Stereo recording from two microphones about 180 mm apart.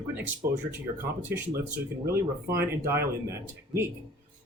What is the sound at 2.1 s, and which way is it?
Speech, 15° right (ahead or behind).